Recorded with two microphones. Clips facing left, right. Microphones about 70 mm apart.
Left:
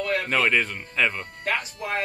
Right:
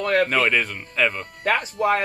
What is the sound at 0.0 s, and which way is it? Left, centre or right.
Speech, right.